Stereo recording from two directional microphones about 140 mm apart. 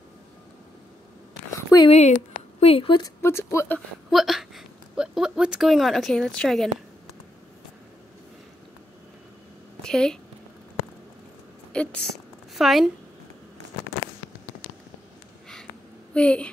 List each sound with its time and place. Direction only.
1.9 s speech: 50° left (ahead or behind)
3.2 s a woman's voice: 20° left (ahead or behind)
4.1 s speech: centre (ahead or behind)
9.8 s speech: 5° left (ahead or behind)
11.7 s a woman's voice: 5° left (ahead or behind)
16.1 s speech: 5° left (ahead or behind)